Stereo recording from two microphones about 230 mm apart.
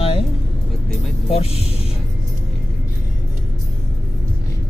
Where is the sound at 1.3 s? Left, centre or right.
Left.